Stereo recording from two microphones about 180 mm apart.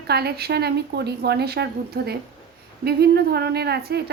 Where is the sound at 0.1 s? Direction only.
60° right (ahead or behind).